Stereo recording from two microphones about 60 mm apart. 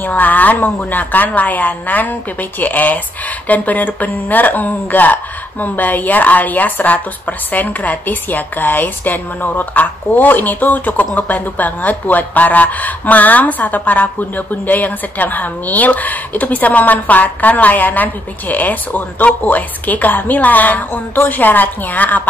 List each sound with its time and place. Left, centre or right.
0.0 s speech: left